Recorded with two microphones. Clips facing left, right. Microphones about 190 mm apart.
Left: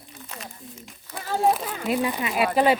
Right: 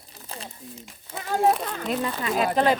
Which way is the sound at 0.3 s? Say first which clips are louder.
Right 2 dB; 35° right (ahead or behind).